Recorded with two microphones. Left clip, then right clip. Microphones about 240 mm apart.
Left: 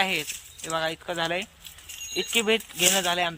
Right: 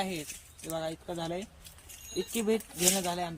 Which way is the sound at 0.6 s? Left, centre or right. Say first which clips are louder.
Left 8 dB; left.